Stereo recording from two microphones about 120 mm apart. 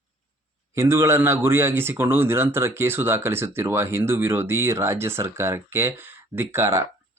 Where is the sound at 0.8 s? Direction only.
20° right (ahead or behind).